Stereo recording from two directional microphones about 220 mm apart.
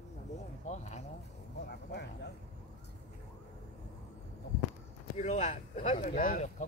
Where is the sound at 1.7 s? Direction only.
50° left (ahead or behind).